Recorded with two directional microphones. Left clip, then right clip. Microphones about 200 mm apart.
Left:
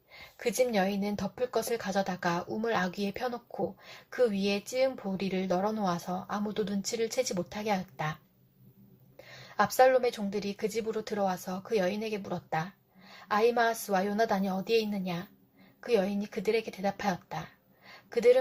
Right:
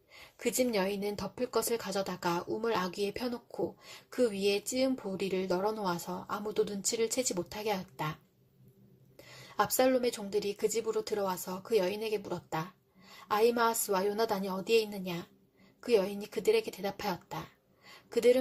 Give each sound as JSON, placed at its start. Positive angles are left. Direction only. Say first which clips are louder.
{"t": 0.5, "sound": "speech", "louder": "left 3 dB", "side_deg": -40}
{"t": 4.1, "sound": "speech", "louder": "left 1 dB", "side_deg": -35}
{"t": 9.7, "sound": "a woman's voice", "louder": "left 6 dB", "side_deg": -40}